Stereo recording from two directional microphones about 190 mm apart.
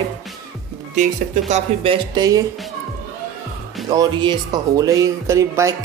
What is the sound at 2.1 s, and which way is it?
Speech, 20° right (ahead or behind).